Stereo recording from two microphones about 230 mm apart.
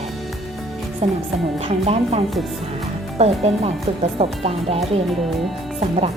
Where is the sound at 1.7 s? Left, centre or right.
Right.